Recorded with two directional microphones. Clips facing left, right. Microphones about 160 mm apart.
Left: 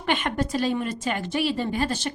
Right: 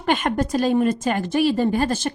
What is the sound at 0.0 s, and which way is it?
A woman's voice, 40° right (ahead or behind).